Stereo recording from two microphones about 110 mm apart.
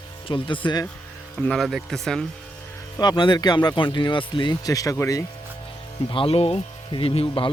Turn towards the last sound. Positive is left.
turn(degrees=55)  # may be behind; listen again after turning